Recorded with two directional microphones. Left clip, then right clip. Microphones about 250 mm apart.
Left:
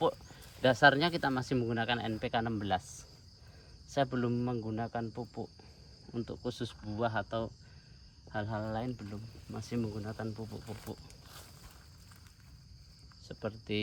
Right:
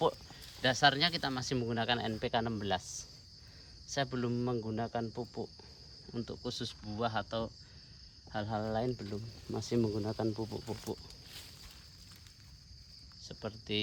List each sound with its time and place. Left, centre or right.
0.0 s speech: centre
10.9 s speech: right
13.2 s speech: centre